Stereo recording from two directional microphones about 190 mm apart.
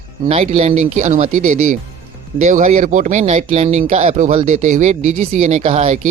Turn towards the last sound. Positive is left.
turn(degrees=-40)  # may be behind; listen again after turning